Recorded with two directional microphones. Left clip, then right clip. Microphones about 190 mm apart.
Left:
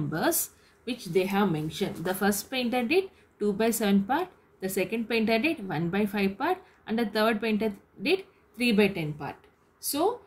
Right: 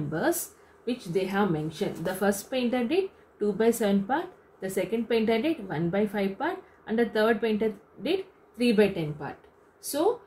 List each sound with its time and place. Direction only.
0.8 s a woman's voice: 35° left (ahead or behind)